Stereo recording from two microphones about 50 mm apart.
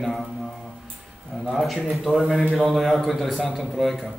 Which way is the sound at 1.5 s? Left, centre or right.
Centre.